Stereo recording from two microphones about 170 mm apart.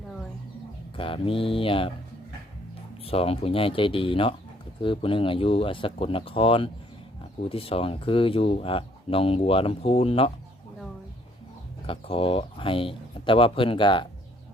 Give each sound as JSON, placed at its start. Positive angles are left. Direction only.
{"t": 0.9, "sound": "speech", "side_deg": 30}
{"t": 3.0, "sound": "speech", "side_deg": 35}
{"t": 11.9, "sound": "speech", "side_deg": 35}